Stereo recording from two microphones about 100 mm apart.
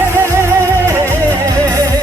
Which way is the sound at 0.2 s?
30° right (ahead or behind).